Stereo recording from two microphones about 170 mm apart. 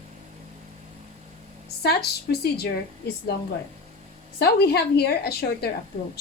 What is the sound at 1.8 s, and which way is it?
Speech, 70° left (ahead or behind).